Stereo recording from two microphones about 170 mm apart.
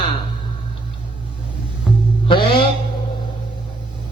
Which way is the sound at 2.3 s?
30° left (ahead or behind).